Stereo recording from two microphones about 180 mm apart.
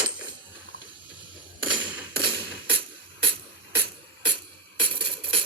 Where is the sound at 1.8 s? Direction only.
5° right (ahead or behind).